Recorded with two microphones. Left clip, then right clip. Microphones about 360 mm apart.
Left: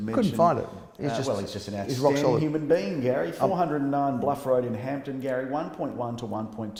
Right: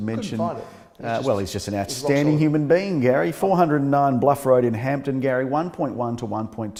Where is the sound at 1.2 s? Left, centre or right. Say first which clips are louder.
Right 6 dB; right.